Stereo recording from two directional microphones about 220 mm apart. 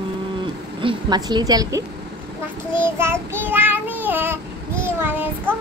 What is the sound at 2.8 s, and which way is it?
Child singing, 10° right (ahead or behind).